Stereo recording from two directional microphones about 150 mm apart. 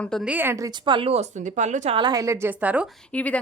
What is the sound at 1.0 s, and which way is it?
Speech, 40° right (ahead or behind).